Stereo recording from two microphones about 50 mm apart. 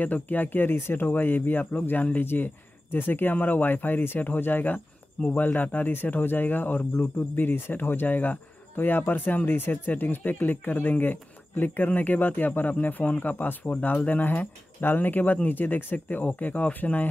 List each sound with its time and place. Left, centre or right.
0.0 s speech: left